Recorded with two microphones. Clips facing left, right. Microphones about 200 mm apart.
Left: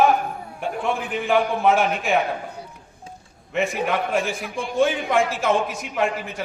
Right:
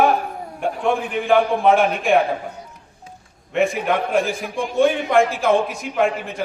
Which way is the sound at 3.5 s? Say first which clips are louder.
Right 4 dB; centre (ahead or behind).